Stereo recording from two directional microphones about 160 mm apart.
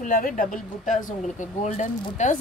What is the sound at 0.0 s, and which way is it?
A woman's voice, 60° left (ahead or behind).